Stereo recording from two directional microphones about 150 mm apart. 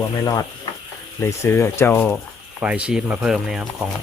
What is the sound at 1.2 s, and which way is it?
Speech, 15° left (ahead or behind).